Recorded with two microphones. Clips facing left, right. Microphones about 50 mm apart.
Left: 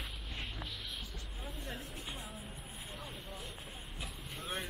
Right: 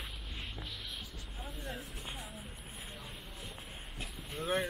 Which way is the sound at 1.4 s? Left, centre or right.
Centre.